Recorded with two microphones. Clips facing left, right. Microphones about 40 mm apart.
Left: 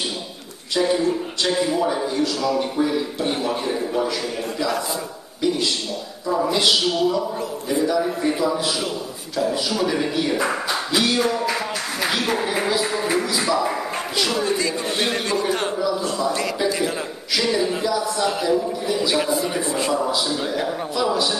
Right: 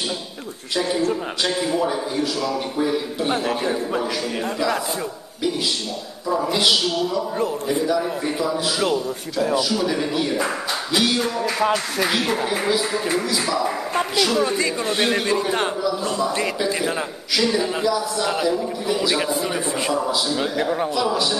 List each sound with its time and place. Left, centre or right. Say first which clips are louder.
1.4 s speech: left 2 dB; centre
6.2 s speech: even; centre
9.7 s a man's voice: even; centre
16.2 s a man's voice: even; right
17.4 s a man's voice: right 1 dB; centre
19.9 s speech: right 1 dB; centre